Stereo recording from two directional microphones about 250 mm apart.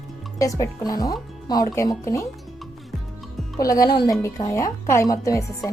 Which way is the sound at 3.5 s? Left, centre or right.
Centre.